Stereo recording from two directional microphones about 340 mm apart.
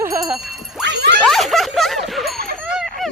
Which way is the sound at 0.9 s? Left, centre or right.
Right.